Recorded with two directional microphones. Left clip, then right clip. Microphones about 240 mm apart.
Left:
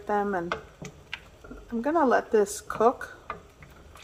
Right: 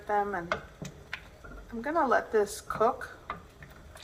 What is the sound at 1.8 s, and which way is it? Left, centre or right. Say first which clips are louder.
Speech: left 3 dB; left.